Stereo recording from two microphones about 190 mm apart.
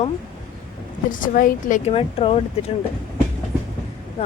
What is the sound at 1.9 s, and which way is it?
Speech, 30° left (ahead or behind).